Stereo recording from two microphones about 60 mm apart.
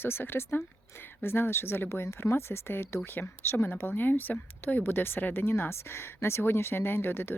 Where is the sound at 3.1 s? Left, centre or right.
Left.